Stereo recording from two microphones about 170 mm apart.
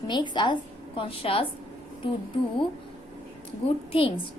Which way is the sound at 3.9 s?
30° left (ahead or behind).